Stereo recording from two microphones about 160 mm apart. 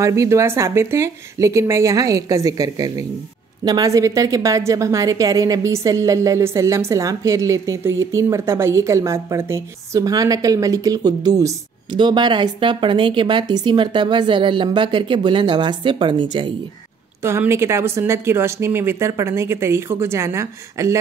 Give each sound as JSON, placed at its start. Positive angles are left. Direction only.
{"t": 0.0, "sound": "a woman's voice", "side_deg": -20}
{"t": 17.2, "sound": "speech", "side_deg": -15}